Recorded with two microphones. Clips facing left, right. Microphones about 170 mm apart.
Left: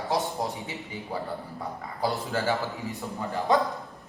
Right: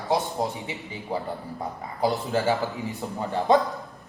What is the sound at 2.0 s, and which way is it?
A man's voice, 20° right (ahead or behind).